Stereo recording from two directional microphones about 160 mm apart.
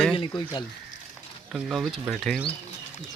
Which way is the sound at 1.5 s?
Centre (ahead or behind).